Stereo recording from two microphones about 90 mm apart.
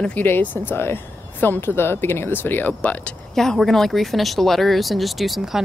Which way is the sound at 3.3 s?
5° left (ahead or behind).